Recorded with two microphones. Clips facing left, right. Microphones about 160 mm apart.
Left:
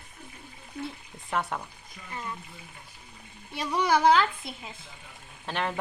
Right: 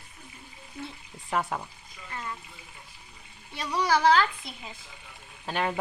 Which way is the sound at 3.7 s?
20° left (ahead or behind).